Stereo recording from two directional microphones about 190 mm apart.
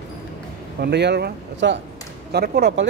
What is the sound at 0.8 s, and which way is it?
Speech, 60° right (ahead or behind).